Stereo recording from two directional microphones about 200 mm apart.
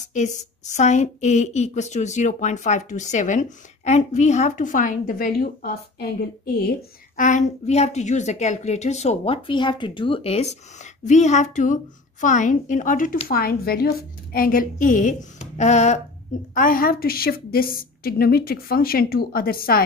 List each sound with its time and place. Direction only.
0.7 s a woman's voice: 35° left (ahead or behind)